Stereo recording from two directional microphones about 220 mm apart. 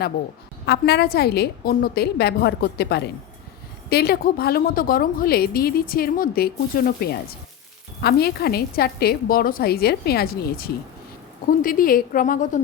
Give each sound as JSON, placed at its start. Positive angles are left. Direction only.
{"t": 0.6, "sound": "a woman's voice", "side_deg": 45}